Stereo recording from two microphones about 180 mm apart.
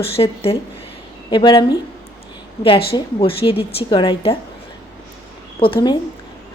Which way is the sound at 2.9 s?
30° left (ahead or behind).